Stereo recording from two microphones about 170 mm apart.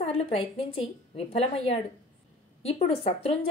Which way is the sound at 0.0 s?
35° left (ahead or behind).